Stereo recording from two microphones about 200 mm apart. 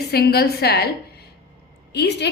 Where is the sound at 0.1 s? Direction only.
50° left (ahead or behind).